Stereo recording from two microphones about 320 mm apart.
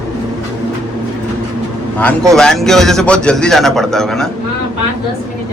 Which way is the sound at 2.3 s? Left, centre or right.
Centre.